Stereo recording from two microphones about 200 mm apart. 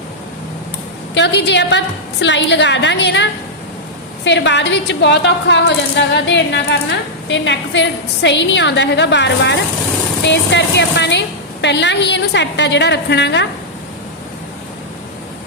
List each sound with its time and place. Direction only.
1.1 s a woman's voice: 60° left (ahead or behind)